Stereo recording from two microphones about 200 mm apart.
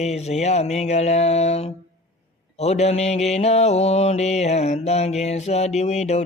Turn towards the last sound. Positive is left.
turn(degrees=35)  # may be behind; listen again after turning